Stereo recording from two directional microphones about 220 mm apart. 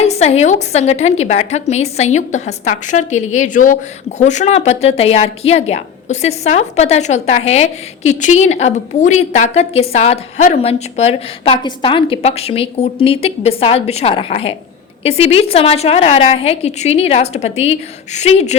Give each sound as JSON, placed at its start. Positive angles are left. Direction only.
{"t": 0.0, "sound": "a woman's voice", "side_deg": 30}